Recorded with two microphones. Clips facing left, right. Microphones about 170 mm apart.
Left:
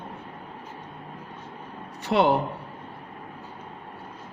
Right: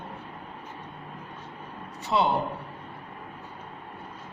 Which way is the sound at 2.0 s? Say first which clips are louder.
Left 4 dB; 70° left (ahead or behind).